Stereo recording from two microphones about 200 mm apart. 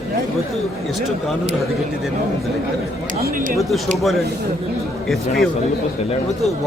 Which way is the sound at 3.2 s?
45° right (ahead or behind).